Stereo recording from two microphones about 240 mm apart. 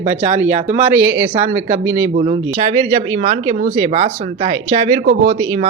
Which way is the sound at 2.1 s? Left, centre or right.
Right.